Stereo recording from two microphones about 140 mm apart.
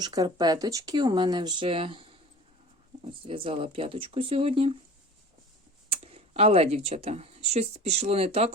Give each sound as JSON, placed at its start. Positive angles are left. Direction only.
{"t": 0.0, "sound": "speech", "side_deg": -25}
{"t": 3.1, "sound": "speech", "side_deg": -40}
{"t": 5.9, "sound": "speech", "side_deg": -45}